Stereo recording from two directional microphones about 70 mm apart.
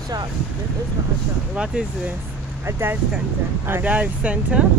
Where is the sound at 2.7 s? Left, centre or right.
Right.